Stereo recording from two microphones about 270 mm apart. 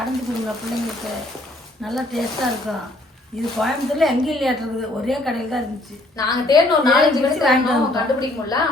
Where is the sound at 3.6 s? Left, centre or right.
Centre.